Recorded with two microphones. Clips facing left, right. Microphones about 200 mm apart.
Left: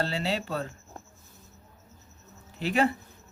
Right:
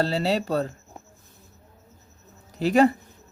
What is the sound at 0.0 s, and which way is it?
Speech, 40° right (ahead or behind).